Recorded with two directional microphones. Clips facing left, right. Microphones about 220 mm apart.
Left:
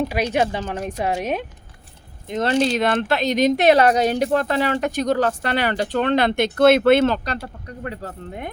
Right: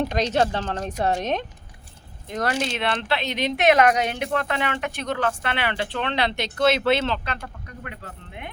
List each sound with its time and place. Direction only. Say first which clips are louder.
0.0 s speech: left 1 dB; 10° left (ahead or behind)
2.2 s speech: left 6 dB; 25° left (ahead or behind); by 7.2 s 50° left (ahead or behind)
7.3 s speech: left 4 dB; 35° left (ahead or behind)